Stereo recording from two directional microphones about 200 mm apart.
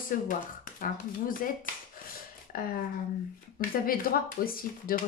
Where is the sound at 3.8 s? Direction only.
45° left (ahead or behind).